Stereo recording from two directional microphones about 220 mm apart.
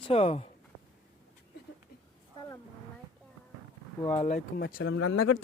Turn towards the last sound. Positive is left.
turn(degrees=60)  # may be behind; listen again after turning